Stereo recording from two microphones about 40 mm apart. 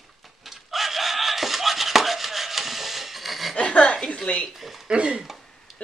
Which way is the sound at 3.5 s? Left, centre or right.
Left.